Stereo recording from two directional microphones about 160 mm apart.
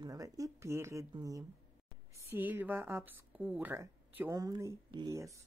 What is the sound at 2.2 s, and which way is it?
A woman's voice, 10° right (ahead or behind).